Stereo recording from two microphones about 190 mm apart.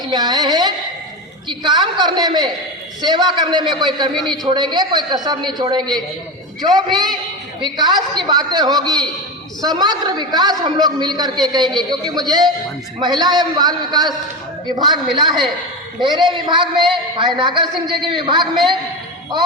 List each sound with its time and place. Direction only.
0.0 s a woman's voice: 20° right (ahead or behind)
4.1 s a man's voice: centre (ahead or behind)
4.7 s a man's voice: 20° right (ahead or behind)